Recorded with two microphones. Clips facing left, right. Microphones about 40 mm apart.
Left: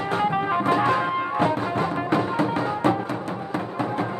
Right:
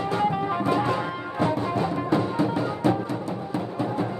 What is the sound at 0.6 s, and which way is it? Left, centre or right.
Music, left.